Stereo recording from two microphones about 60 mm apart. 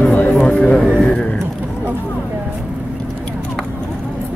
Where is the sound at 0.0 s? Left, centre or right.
Left.